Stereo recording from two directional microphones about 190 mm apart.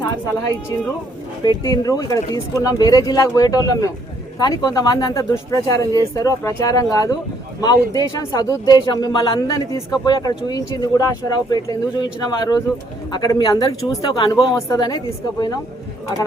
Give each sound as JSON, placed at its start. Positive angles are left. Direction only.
{"t": 1.5, "sound": "speech", "side_deg": 20}